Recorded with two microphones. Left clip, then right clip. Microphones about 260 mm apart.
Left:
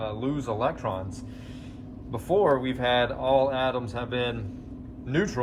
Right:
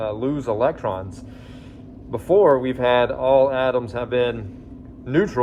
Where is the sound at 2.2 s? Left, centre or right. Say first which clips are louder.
Right 7 dB; centre.